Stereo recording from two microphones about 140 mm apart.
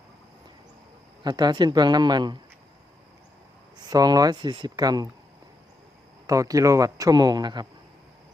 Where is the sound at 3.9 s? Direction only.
25° right (ahead or behind).